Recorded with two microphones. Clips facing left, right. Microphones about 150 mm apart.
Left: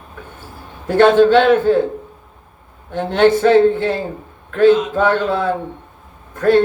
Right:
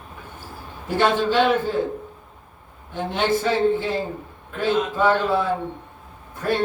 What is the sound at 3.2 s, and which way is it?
A man's voice, 60° left (ahead or behind).